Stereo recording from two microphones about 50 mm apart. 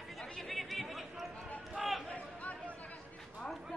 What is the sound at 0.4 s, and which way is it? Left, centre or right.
Chatter, centre.